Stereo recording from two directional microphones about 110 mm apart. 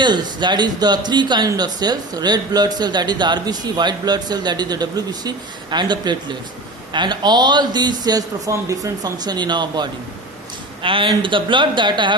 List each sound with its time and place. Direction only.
0.0 s speech: 45° right (ahead or behind)